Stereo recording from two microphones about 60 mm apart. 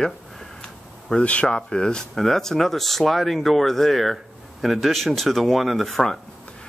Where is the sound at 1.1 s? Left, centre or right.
Centre.